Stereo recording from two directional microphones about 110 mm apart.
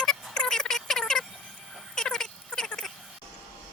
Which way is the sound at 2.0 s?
5° left (ahead or behind).